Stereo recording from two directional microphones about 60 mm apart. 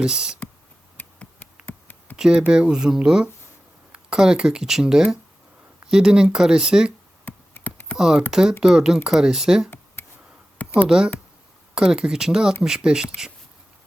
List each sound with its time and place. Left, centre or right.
0.0 s speech: centre
1.4 s a sound: left
2.1 s speech: centre
7.3 s computer keyboard: left
7.9 s speech: centre
10.0 s a sound: left
10.8 s speech: centre